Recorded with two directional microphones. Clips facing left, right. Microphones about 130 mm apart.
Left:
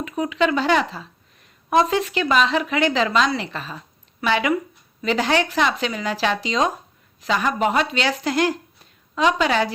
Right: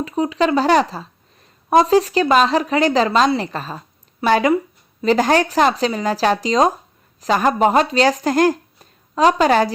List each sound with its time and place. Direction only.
0.0 s a woman's voice: 35° right (ahead or behind)